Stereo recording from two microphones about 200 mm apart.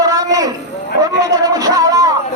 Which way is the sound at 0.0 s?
20° right (ahead or behind).